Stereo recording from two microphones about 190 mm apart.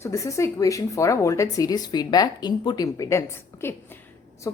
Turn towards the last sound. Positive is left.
turn(degrees=20)  # may be behind; listen again after turning